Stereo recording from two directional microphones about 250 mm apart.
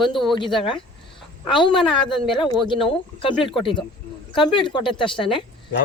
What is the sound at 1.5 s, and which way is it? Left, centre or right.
A woman's voice, centre.